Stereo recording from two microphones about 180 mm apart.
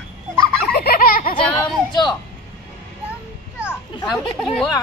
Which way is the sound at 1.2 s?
30° left (ahead or behind).